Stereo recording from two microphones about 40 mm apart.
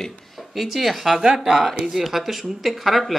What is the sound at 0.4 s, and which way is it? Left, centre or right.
Speech, centre.